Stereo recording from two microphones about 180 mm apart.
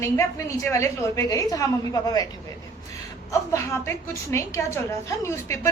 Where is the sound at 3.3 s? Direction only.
15° left (ahead or behind).